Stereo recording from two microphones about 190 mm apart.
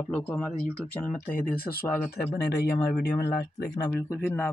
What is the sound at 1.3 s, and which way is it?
Speech, 50° left (ahead or behind).